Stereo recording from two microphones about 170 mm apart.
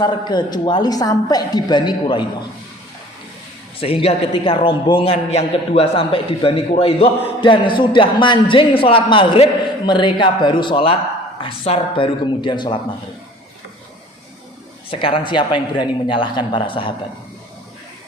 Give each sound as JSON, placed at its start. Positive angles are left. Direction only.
{"t": 0.0, "sound": "a woman's voice", "side_deg": 25}
{"t": 3.8, "sound": "a man's voice", "side_deg": 35}
{"t": 14.8, "sound": "a woman's voice", "side_deg": 30}